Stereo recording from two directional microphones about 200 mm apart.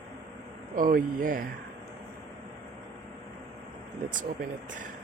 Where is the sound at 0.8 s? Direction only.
45° right (ahead or behind).